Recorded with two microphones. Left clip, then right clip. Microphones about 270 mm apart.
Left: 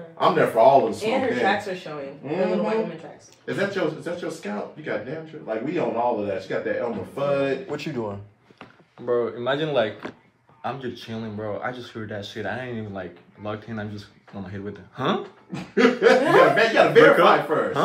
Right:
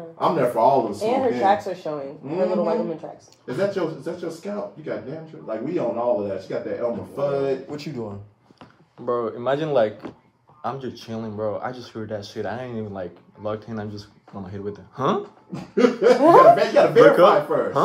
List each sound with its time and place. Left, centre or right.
0.2 s speech: centre
9.0 s speech: centre